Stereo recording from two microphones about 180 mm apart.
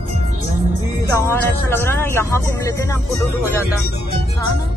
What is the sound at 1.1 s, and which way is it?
Vehicle, 15° left (ahead or behind).